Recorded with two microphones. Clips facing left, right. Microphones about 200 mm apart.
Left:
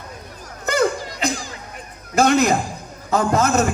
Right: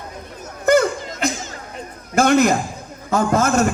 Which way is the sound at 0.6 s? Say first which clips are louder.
Right 5 dB; 50° right (ahead or behind).